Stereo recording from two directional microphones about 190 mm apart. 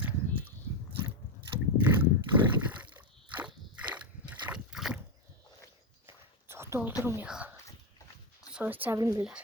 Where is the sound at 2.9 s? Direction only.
10° right (ahead or behind).